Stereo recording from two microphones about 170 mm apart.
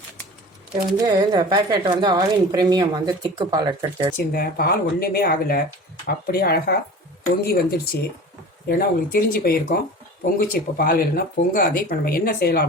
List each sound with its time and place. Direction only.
0.9 s speech: 20° right (ahead or behind)
4.3 s speech: 60° left (ahead or behind)